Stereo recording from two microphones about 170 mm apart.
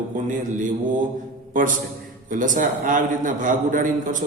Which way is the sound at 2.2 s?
50° right (ahead or behind).